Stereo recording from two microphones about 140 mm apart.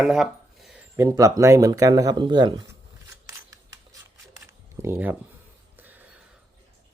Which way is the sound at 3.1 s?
25° right (ahead or behind).